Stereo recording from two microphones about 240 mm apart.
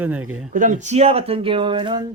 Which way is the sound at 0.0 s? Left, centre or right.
Centre.